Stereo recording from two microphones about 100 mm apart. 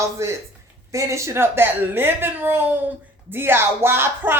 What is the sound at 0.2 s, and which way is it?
Speech, 30° right (ahead or behind).